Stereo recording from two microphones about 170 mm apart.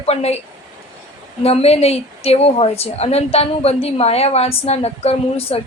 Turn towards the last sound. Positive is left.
turn(degrees=35)  # may be behind; listen again after turning